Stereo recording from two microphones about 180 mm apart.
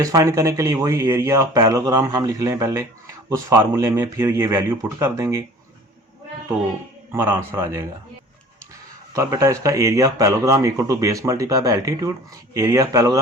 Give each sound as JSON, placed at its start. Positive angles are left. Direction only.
{"t": 0.0, "sound": "speech", "side_deg": -20}
{"t": 7.1, "sound": "speech", "side_deg": -15}
{"t": 9.1, "sound": "speech", "side_deg": -15}